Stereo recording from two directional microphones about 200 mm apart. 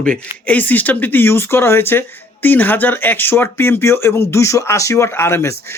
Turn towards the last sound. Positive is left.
turn(degrees=10)  # may be behind; listen again after turning